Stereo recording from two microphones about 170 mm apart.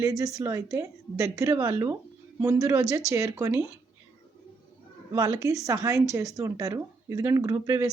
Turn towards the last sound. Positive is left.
turn(degrees=-20)  # may be behind; listen again after turning